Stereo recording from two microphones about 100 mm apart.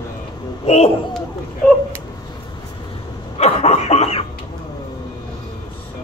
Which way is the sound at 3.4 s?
90° left.